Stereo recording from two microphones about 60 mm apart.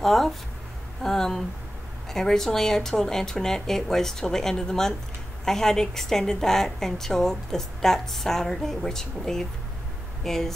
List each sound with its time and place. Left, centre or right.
0.0 s a woman's voice: centre